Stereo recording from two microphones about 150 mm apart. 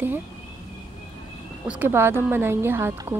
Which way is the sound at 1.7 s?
15° right (ahead or behind).